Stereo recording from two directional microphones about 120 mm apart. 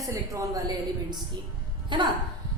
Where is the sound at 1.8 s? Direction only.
40° right (ahead or behind).